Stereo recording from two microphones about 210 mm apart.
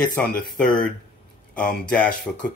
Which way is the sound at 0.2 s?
5° left (ahead or behind).